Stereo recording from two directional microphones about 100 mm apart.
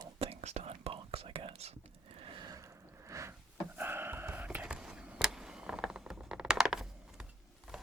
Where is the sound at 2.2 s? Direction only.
60° right (ahead or behind).